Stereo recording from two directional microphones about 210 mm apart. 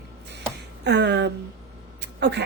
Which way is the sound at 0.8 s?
55° right (ahead or behind).